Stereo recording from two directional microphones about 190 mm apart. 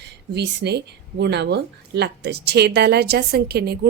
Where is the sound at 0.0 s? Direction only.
60° right (ahead or behind).